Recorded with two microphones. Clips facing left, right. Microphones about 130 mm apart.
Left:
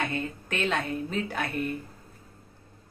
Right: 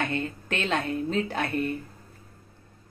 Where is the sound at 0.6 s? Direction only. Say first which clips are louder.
Right 1 dB; 30° right (ahead or behind).